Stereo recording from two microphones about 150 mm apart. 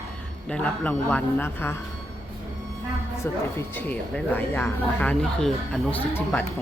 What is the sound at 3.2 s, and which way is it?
Speech, 15° left (ahead or behind).